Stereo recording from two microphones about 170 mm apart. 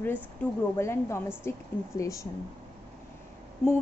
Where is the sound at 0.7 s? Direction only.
15° left (ahead or behind).